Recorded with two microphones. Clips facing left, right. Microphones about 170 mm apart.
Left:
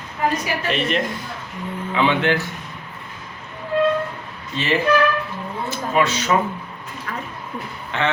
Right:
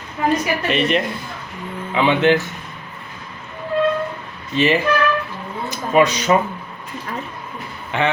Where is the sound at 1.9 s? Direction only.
20° right (ahead or behind).